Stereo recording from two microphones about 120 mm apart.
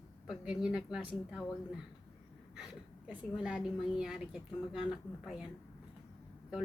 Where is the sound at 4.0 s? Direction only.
5° right (ahead or behind).